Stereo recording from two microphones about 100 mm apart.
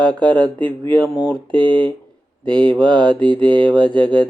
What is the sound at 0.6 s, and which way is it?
Speech, 55° right (ahead or behind).